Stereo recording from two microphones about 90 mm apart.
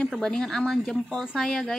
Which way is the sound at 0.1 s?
5° left (ahead or behind).